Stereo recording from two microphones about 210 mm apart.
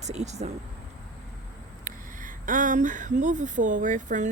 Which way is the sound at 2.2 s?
40° right (ahead or behind).